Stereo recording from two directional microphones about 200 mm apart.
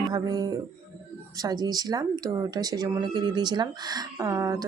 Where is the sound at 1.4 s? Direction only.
20° right (ahead or behind).